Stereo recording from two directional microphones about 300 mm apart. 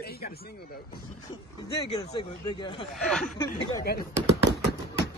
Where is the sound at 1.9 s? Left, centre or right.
Centre.